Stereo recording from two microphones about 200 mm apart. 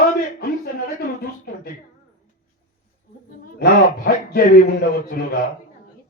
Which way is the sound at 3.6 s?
50° left (ahead or behind).